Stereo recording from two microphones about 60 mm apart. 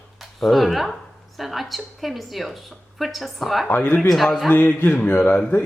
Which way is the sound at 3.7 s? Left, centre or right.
Left.